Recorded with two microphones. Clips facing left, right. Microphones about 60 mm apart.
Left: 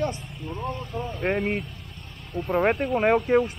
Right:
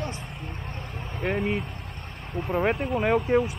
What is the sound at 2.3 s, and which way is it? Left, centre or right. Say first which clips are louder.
Speech: left 1 dB; right.